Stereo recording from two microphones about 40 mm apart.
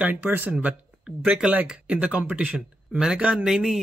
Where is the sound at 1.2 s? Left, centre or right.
Centre.